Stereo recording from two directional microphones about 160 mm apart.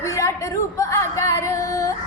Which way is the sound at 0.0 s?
20° left (ahead or behind).